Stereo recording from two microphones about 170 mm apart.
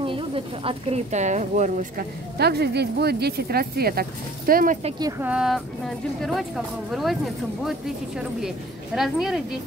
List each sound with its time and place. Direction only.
0.0 s speech: 30° right (ahead or behind)
2.3 s speech: 70° right (ahead or behind)
5.2 s speech: 5° right (ahead or behind)
8.9 s speech: centre (ahead or behind)